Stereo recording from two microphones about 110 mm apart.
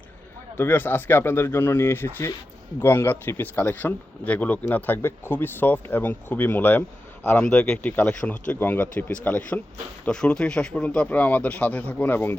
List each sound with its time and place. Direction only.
0.5 s speech: 15° left (ahead or behind)